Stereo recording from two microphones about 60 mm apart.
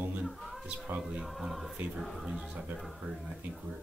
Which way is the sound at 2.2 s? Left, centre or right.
Centre.